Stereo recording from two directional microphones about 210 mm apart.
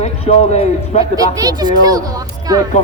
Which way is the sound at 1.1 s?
15° right (ahead or behind).